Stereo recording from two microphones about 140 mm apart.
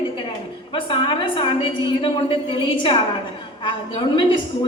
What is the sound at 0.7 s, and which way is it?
A woman's voice, 35° left (ahead or behind).